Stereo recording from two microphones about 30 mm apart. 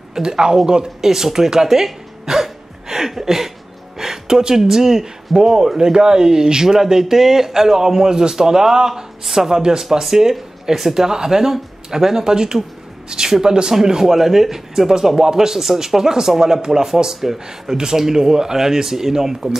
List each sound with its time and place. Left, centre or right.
0.1 s speech: right
1.0 s speech: centre
2.2 s a sound: centre
4.0 s music: centre
4.6 s speech: centre
9.5 s speech: right
14.1 s speech: centre